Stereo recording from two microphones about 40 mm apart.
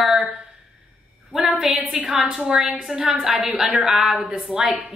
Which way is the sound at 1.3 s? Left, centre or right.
Centre.